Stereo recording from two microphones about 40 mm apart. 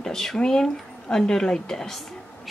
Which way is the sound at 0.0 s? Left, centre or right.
Centre.